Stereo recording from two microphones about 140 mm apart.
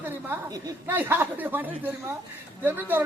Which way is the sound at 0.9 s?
15° right (ahead or behind).